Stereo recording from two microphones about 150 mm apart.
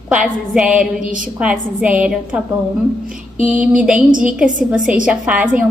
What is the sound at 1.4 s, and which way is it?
A woman's voice, 10° right (ahead or behind).